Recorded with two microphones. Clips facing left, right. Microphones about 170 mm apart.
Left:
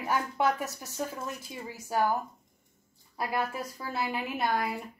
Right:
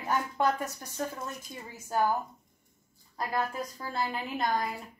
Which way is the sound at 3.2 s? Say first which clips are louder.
Even; 10° left (ahead or behind).